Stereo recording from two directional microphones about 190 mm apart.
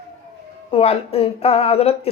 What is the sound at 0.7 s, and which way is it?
A man's voice, 30° left (ahead or behind).